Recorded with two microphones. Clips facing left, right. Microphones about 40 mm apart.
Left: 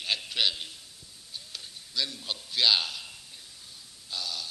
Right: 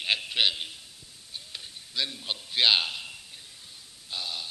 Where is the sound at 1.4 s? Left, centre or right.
Right.